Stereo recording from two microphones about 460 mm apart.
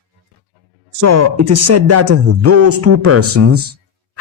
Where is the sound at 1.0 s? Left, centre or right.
Right.